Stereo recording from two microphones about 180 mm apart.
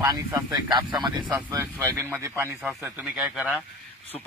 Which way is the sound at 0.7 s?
25° right (ahead or behind).